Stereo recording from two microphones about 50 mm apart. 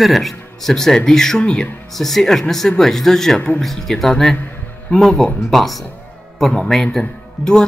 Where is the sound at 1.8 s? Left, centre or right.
Centre.